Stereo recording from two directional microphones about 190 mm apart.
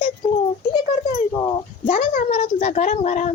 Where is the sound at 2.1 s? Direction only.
35° left (ahead or behind).